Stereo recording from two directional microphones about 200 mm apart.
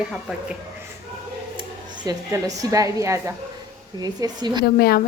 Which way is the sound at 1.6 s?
20° right (ahead or behind).